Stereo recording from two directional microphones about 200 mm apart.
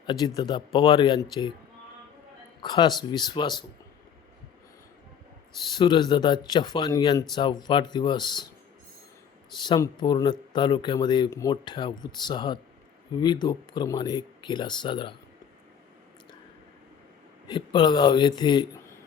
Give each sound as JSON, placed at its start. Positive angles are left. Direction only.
{"t": 0.0, "sound": "speech", "side_deg": 25}
{"t": 2.6, "sound": "speech", "side_deg": 20}
{"t": 5.7, "sound": "speech", "side_deg": 20}
{"t": 9.6, "sound": "speech", "side_deg": 20}
{"t": 17.5, "sound": "speech", "side_deg": 25}